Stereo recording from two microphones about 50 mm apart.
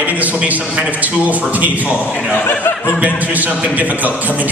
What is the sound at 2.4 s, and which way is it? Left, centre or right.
Speech, left.